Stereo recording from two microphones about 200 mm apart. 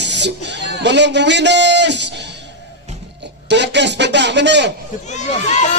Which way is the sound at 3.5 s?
60° right (ahead or behind).